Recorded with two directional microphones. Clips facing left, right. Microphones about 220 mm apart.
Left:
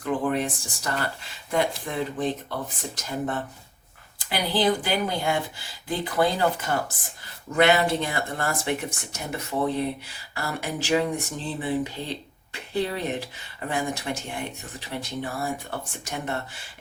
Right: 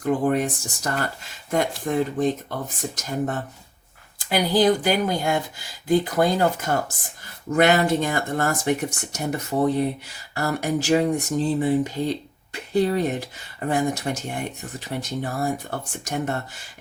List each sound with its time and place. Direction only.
0.0 s speech: 45° right (ahead or behind)